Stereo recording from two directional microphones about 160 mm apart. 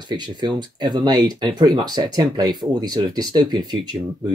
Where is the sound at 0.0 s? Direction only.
25° right (ahead or behind).